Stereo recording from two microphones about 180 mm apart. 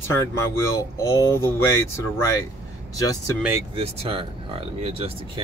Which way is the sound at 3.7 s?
30° right (ahead or behind).